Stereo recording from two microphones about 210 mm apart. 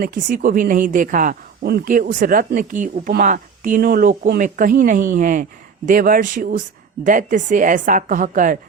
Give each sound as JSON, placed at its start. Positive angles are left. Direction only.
{"t": 0.0, "sound": "speech", "side_deg": -40}